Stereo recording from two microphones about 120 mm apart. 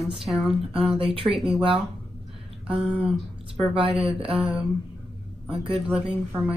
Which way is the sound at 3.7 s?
50° right (ahead or behind).